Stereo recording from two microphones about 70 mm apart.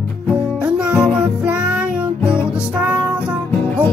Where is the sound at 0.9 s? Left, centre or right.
Centre.